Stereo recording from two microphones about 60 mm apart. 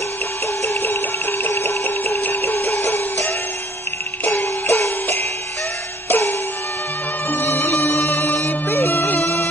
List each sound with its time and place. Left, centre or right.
0.7 s music: left
1.9 s a sound: left
2.2 s music: left
4.4 s music: left